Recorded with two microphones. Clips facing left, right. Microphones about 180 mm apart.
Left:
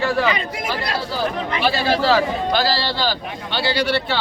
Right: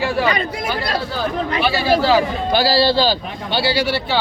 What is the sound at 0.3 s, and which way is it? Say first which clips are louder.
Speech: right 2 dB; 35° right (ahead or behind).